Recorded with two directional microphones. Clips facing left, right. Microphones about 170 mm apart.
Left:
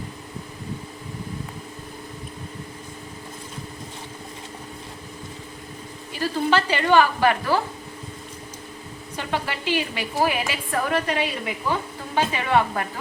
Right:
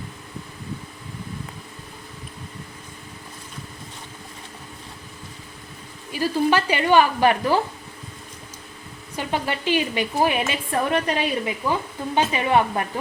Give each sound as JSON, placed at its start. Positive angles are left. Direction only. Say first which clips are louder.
{"t": 6.1, "sound": "a woman's voice", "louder": "right 2 dB", "side_deg": -15}
{"t": 9.1, "sound": "a woman's voice", "louder": "right 2 dB", "side_deg": -15}